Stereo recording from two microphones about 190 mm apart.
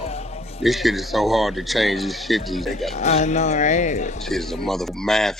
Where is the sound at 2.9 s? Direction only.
35° left (ahead or behind).